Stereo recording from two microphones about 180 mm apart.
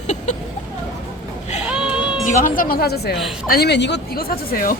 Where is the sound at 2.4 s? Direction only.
50° left (ahead or behind).